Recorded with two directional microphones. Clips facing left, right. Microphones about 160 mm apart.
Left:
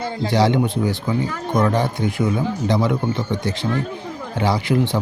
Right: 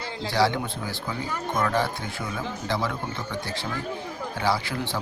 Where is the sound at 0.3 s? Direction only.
20° left (ahead or behind).